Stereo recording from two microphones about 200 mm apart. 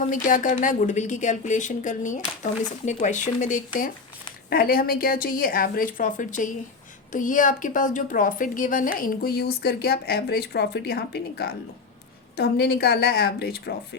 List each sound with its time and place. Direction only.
0.0 s a woman's voice: 40° left (ahead or behind)